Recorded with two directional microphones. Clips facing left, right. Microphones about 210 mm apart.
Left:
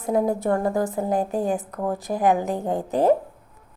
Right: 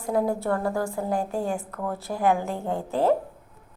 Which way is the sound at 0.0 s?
20° left (ahead or behind).